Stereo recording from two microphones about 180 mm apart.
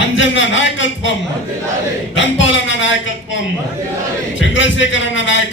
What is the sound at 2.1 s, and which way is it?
Speech, 90° left.